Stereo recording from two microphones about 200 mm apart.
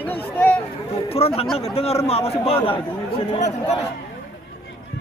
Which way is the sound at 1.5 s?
30° left (ahead or behind).